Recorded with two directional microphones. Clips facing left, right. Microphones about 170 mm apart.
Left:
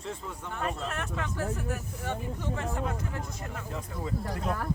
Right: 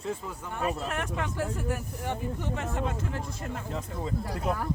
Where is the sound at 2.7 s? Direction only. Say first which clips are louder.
Right 2 dB; 25° right (ahead or behind).